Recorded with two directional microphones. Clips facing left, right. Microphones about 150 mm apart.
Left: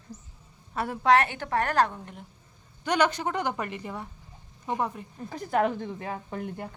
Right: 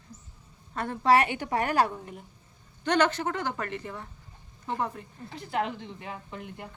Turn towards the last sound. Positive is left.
turn(degrees=45)  # may be behind; listen again after turning